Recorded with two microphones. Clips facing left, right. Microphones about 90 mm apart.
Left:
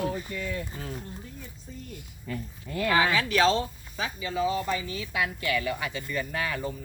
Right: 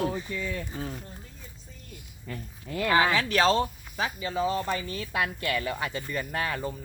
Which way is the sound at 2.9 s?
35° right (ahead or behind).